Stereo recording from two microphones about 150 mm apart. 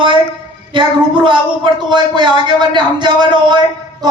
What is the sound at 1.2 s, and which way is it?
Speech, 30° right (ahead or behind).